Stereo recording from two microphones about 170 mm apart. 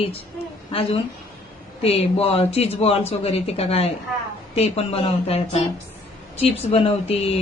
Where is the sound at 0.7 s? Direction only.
35° left (ahead or behind).